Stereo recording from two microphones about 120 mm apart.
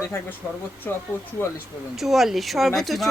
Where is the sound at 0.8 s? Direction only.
15° left (ahead or behind).